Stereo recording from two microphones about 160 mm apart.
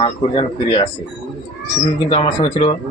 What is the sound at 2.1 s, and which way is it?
Speech, 30° left (ahead or behind).